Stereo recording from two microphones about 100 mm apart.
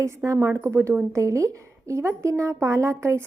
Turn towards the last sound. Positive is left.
turn(degrees=-30)  # may be behind; listen again after turning